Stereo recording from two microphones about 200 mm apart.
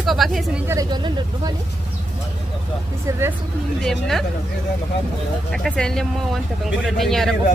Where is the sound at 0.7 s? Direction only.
20° right (ahead or behind).